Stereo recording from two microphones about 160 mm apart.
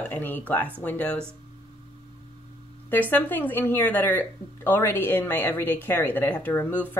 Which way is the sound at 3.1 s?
10° left (ahead or behind).